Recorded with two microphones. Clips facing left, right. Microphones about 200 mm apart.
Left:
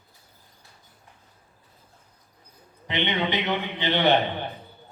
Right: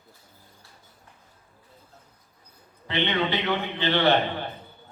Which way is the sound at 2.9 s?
20° left (ahead or behind).